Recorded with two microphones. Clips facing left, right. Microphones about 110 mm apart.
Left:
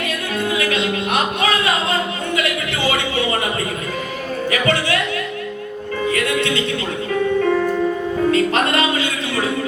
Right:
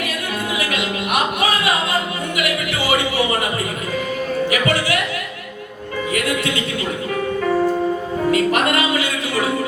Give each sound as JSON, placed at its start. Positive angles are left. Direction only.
{"t": 8.3, "sound": "music", "side_deg": 30}